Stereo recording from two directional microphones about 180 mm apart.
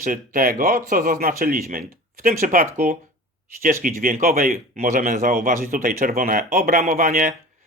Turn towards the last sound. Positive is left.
turn(degrees=-55)  # may be behind; listen again after turning